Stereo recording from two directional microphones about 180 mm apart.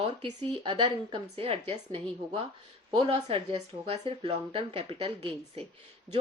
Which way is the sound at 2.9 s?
30° right (ahead or behind).